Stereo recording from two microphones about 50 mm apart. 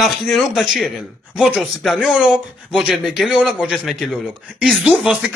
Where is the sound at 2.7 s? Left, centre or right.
Centre.